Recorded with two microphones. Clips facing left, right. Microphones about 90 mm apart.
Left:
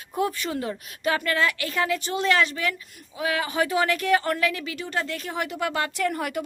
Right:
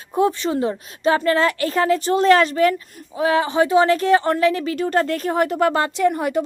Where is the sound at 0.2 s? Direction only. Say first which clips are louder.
Right 8 dB; 25° right (ahead or behind).